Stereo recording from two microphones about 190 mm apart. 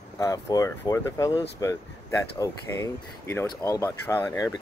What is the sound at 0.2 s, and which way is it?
Speech, 20° left (ahead or behind).